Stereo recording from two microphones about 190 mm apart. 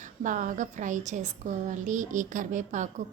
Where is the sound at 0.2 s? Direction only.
40° right (ahead or behind).